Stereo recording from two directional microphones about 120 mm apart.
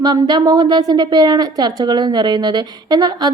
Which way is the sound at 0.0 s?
35° right (ahead or behind).